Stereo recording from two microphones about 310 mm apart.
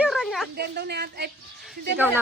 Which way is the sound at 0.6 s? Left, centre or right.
Right.